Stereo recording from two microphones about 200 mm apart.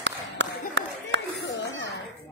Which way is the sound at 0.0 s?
65° right (ahead or behind).